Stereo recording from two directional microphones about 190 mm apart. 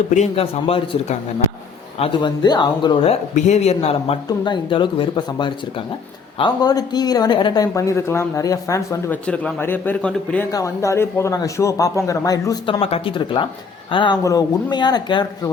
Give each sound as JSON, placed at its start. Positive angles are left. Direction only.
{"t": 0.1, "sound": "speech", "side_deg": 35}
{"t": 2.0, "sound": "speech", "side_deg": 25}
{"t": 9.2, "sound": "a man's voice", "side_deg": 5}